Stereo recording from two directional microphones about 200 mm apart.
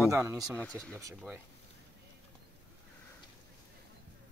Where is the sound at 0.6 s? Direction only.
5° left (ahead or behind).